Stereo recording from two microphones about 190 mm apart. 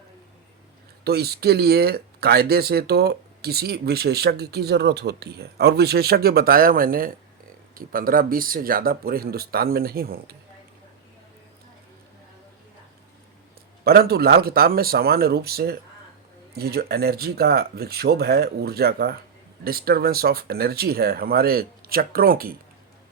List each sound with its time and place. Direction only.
1.0 s speech: 60° right (ahead or behind)
13.8 s speech: 55° right (ahead or behind)